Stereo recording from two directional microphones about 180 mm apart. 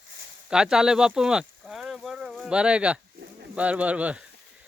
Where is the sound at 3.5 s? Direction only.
5° right (ahead or behind).